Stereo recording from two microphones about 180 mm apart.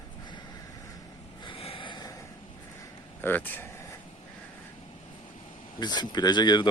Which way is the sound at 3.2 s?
10° left (ahead or behind).